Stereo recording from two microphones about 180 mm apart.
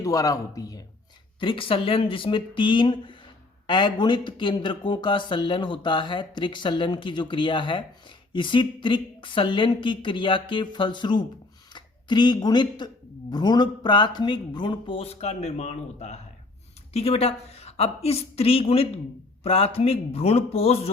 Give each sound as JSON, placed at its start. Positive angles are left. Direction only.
{"t": 0.0, "sound": "a woman's voice", "side_deg": 20}